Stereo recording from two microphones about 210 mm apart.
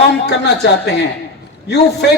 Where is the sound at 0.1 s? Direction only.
55° left (ahead or behind).